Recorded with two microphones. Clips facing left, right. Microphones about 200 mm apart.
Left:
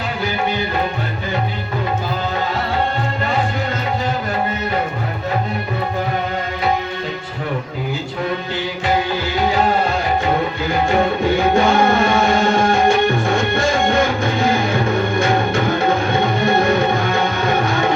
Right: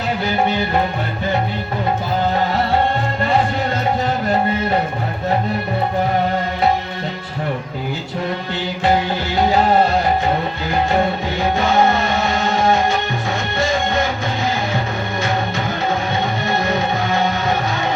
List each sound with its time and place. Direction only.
11.5 s music: 55° left (ahead or behind)
16.6 s music: 55° left (ahead or behind)